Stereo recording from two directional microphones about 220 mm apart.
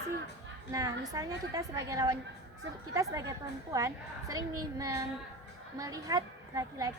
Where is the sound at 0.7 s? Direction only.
15° right (ahead or behind).